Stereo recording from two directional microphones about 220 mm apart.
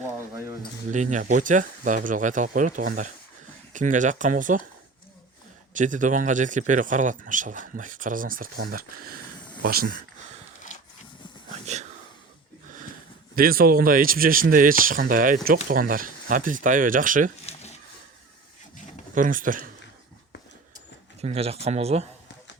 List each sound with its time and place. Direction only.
0.9 s speech: 35° right (ahead or behind)
5.7 s speech: 35° right (ahead or behind)
11.6 s whispering: 30° right (ahead or behind)
13.3 s speech: 40° right (ahead or behind)
17.4 s a sound: 30° left (ahead or behind)
19.1 s speech: 35° right (ahead or behind)
21.2 s speech: 30° right (ahead or behind)